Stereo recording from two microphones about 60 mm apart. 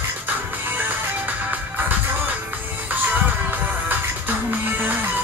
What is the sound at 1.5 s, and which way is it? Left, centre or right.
Music, right.